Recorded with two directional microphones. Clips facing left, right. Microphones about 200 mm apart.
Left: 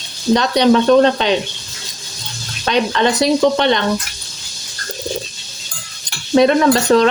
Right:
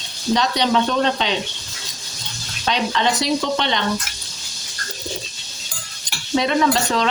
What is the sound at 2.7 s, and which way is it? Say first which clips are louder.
Speech: left 5 dB; 55° left (ahead or behind).